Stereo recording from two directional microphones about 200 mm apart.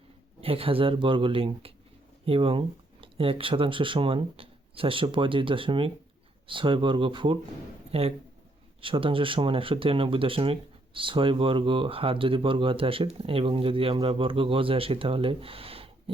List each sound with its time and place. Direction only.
0.4 s speech: 30° right (ahead or behind)